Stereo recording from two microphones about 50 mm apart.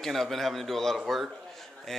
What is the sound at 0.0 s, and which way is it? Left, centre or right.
A man's voice, centre.